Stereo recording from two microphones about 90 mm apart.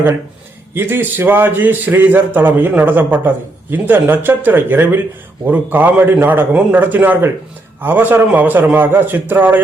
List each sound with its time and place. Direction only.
0.7 s a man's voice: 25° right (ahead or behind)